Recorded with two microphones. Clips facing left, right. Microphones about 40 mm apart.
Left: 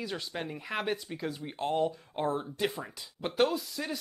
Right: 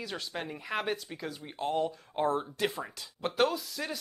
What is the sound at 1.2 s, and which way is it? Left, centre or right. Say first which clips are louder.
Speech: left 1 dB; centre.